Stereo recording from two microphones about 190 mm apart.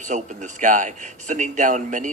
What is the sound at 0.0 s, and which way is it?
A man's voice, 40° right (ahead or behind).